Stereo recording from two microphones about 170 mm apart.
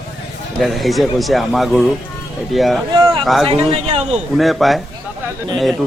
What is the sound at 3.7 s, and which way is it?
Speech, 35° right (ahead or behind).